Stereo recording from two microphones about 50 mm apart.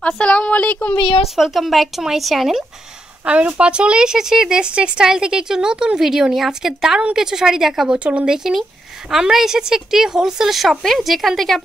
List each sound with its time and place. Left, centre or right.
0.0 s a woman's voice: left
1.3 s speech: centre
3.3 s speech: right; by 8.0 s centre
8.0 s speech: right
9.1 s speech: centre